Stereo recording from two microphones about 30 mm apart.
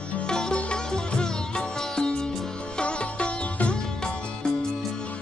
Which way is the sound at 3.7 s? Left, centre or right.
Left.